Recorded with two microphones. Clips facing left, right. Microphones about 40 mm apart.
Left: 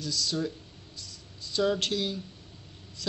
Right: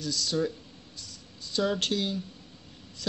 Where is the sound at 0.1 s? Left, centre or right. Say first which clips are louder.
Right 2 dB; centre.